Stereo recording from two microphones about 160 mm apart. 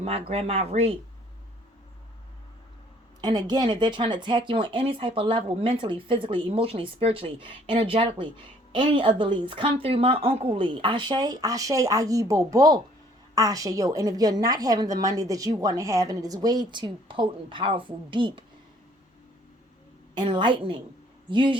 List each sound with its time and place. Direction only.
0.0 s speech: 40° right (ahead or behind)
3.2 s speech: 25° right (ahead or behind)
20.1 s speech: 30° right (ahead or behind)